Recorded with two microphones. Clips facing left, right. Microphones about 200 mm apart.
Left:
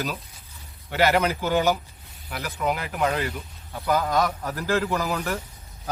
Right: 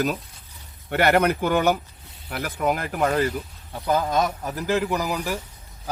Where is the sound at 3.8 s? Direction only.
20° right (ahead or behind).